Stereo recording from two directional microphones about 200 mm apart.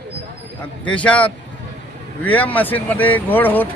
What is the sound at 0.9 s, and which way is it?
A man's voice, 5° left (ahead or behind).